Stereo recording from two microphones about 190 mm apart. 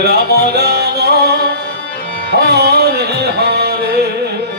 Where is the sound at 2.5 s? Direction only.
55° right (ahead or behind).